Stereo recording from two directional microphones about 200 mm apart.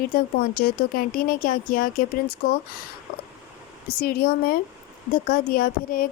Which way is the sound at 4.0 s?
50° left (ahead or behind).